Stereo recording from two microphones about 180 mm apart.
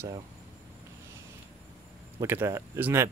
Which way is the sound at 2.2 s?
15° right (ahead or behind).